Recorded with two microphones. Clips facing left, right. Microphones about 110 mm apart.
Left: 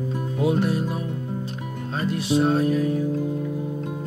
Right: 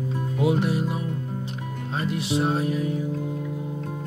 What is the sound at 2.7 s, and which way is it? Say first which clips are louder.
Music: left 4 dB; 80° left.